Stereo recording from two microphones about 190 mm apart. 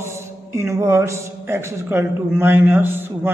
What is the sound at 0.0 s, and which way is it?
A man's voice, 15° right (ahead or behind).